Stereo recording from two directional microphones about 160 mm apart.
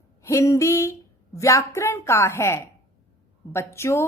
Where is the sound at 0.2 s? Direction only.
20° left (ahead or behind).